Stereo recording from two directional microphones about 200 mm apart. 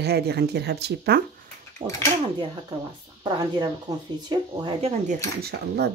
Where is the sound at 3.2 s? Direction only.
20° right (ahead or behind).